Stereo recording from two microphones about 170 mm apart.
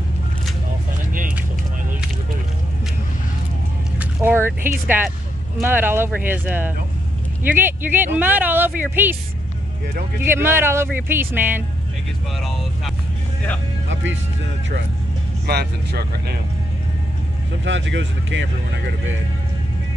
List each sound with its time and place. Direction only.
4.0 s speech: 15° right (ahead or behind)
10.1 s speech: 15° right (ahead or behind)
15.4 s speech: 70° right (ahead or behind)
17.6 s speech: 90° right